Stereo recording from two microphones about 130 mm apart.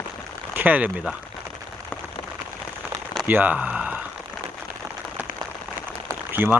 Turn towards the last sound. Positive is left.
turn(degrees=-15)  # may be behind; listen again after turning